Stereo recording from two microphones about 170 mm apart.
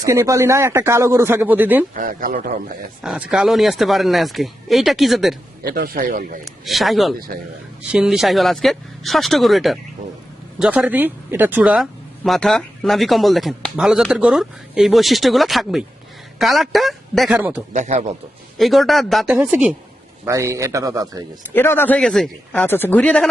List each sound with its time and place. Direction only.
0.0 s speech: 20° right (ahead or behind)
1.9 s a man's voice: 55° right (ahead or behind)
3.0 s speech: 5° right (ahead or behind)
5.6 s speech: 60° right (ahead or behind)
6.7 s speech: centre (ahead or behind)
17.7 s a man's voice: 45° right (ahead or behind)
18.5 s speech: centre (ahead or behind)
20.2 s speech: 20° right (ahead or behind)
21.5 s speech: 10° left (ahead or behind)